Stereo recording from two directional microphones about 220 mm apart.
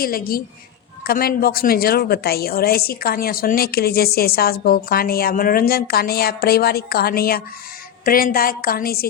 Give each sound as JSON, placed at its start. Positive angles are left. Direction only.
{"t": 0.0, "sound": "a woman's voice", "side_deg": 40}